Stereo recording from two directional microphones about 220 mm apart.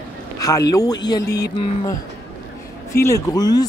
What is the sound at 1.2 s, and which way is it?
Music, 50° left (ahead or behind).